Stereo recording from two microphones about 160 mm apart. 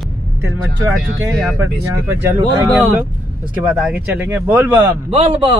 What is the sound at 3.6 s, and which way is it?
Speech, 5° right (ahead or behind).